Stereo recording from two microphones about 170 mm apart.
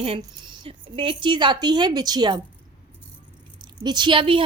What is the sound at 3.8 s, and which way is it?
Speech, 25° right (ahead or behind).